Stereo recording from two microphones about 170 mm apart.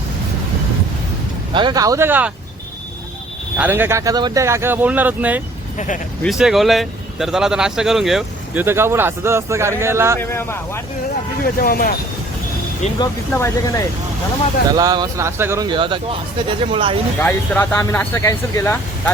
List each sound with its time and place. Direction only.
1.5 s speech: 25° right (ahead or behind)
3.6 s speech: 10° right (ahead or behind)
8.6 s speech: 15° right (ahead or behind)
10.2 s speech: 15° left (ahead or behind)
11.4 s speech: 60° left (ahead or behind)
13.3 s speech: 15° left (ahead or behind)
14.7 s speech: 20° right (ahead or behind)
15.6 s speech: 30° right (ahead or behind)
17.2 s speech: 10° left (ahead or behind)